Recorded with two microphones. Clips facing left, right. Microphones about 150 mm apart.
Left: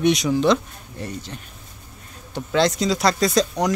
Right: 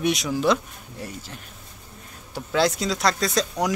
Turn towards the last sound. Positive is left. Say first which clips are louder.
# left 4 dB
turn(degrees=0)  # may be behind; listen again after turning